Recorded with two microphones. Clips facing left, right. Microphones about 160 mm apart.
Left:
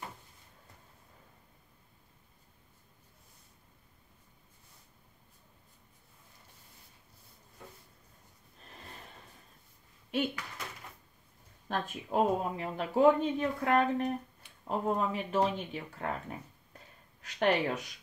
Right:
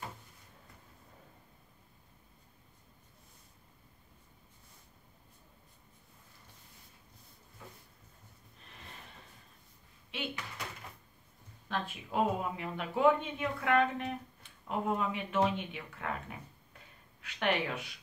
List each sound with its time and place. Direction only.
10.1 s speech: 45° left (ahead or behind)
11.7 s speech: 45° left (ahead or behind)